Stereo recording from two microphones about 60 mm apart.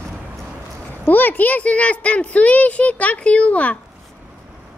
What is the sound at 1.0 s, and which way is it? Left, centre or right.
A woman's voice, left.